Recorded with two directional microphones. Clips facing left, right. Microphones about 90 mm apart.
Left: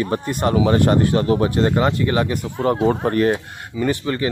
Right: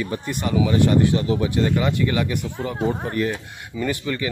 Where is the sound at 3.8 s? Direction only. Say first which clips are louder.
Left 4 dB; 35° left (ahead or behind).